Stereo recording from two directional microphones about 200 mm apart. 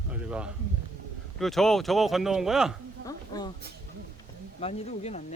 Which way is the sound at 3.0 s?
20° left (ahead or behind).